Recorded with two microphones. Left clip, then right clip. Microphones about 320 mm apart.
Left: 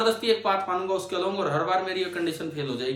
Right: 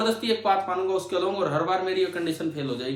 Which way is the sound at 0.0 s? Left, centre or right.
Centre.